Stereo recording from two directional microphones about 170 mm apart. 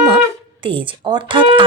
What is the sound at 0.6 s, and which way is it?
Speech, 30° right (ahead or behind).